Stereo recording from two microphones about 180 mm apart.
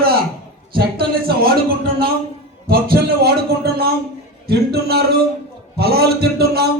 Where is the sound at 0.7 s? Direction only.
60° right (ahead or behind).